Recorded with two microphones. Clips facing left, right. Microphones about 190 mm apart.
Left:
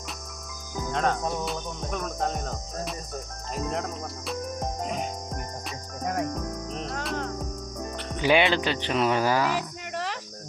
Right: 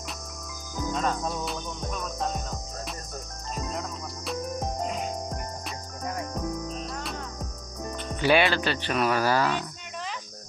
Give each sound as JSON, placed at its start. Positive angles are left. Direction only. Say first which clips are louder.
{"t": 0.9, "sound": "music", "louder": "left 3 dB", "side_deg": 65}
{"t": 6.7, "sound": "cricket", "louder": "left 2 dB", "side_deg": 70}
{"t": 8.2, "sound": "speech", "louder": "even", "side_deg": 15}
{"t": 9.9, "sound": "cricket", "louder": "left 5 dB", "side_deg": 70}